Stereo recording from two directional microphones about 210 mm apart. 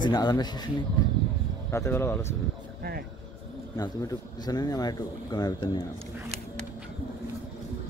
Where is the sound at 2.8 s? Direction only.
45° right (ahead or behind).